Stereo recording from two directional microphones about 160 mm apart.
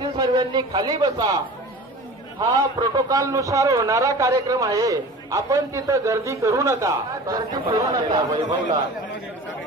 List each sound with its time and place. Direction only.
0.0 s speech: 30° right (ahead or behind)
2.8 s a man's voice: 25° right (ahead or behind)